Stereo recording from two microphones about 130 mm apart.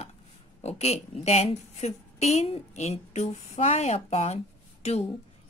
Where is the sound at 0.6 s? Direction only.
55° left (ahead or behind).